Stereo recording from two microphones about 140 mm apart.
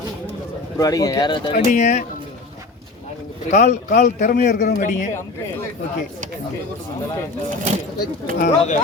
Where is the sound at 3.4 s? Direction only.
55° left (ahead or behind).